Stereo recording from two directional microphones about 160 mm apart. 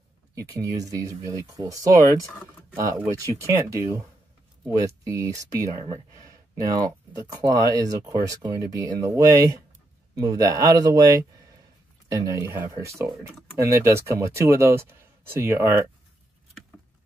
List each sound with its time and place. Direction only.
0.3 s speech: 20° right (ahead or behind)
12.1 s speech: 15° right (ahead or behind)